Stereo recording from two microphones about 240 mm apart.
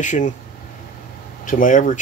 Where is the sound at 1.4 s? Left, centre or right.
Left.